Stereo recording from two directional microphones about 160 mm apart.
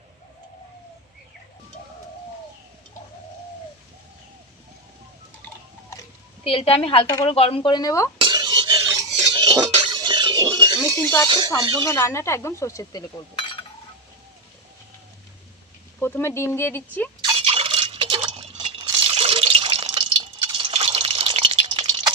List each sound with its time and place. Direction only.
6.4 s speech: 35° left (ahead or behind); by 8.1 s 20° left (ahead or behind)
8.2 s cutlery: 25° right (ahead or behind)
10.9 s speech: 20° left (ahead or behind)
11.3 s speech: 25° right (ahead or behind)
11.9 s speech: 20° left (ahead or behind)
16.0 s speech: 15° left (ahead or behind)
17.2 s a sound: 25° right (ahead or behind)
17.4 s water: 35° right (ahead or behind)